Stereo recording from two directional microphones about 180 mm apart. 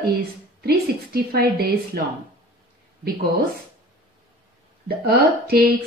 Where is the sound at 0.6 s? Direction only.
60° right (ahead or behind).